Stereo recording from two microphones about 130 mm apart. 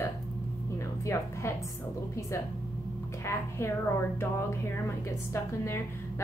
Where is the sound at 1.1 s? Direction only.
20° left (ahead or behind).